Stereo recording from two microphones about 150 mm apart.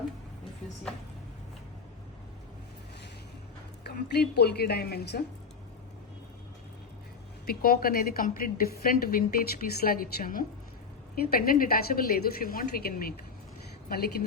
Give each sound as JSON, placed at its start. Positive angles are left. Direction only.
{"t": 3.8, "sound": "a woman's voice", "side_deg": 90}
{"t": 7.4, "sound": "a woman's voice", "side_deg": 75}